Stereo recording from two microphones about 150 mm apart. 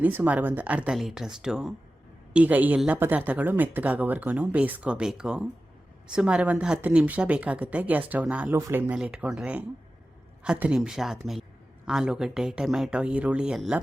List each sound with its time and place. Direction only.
0.0 s speech: 10° right (ahead or behind)